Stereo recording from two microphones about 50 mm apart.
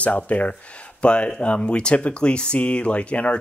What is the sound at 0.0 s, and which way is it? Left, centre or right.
Speech, left.